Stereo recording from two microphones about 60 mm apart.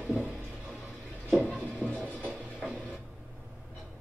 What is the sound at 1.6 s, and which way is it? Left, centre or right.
Music, left.